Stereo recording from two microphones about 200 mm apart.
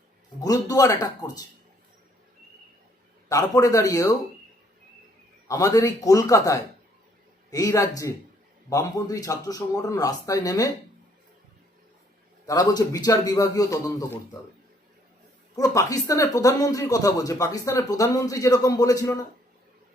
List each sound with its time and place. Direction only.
0.4 s speech: 20° left (ahead or behind)
3.2 s speech: 15° left (ahead or behind)
5.5 s speech: 15° left (ahead or behind)
12.5 s speech: 15° left (ahead or behind)
15.5 s speech: 15° left (ahead or behind)